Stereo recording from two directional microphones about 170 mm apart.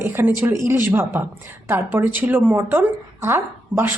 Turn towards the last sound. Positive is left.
turn(degrees=-15)  # may be behind; listen again after turning